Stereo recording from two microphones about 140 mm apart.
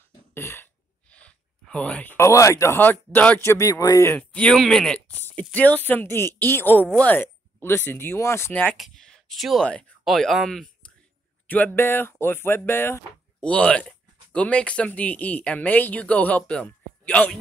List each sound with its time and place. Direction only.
0.3 s cough: 15° left (ahead or behind)
1.1 s speech: 10° left (ahead or behind)
4.2 s speech: 10° left (ahead or behind)
8.7 s speech: centre (ahead or behind)
11.4 s speech: 10° left (ahead or behind)